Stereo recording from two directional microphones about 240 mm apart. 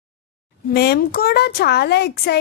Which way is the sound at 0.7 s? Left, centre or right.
Left.